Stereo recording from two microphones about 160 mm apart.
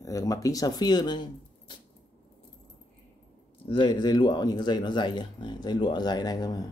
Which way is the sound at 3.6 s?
30° left (ahead or behind).